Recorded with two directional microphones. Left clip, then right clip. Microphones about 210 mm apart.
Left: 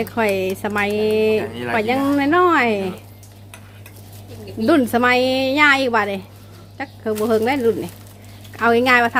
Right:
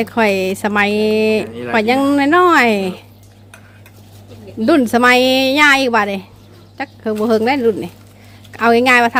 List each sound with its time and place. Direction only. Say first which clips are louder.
0.0 s speech: right 4 dB; 20° right (ahead or behind)
4.6 s a woman's voice: right 4 dB; 15° right (ahead or behind)